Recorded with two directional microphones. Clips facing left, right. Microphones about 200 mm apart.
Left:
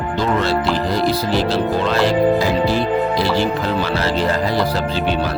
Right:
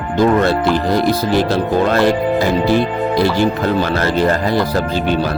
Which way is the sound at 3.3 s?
50° right (ahead or behind).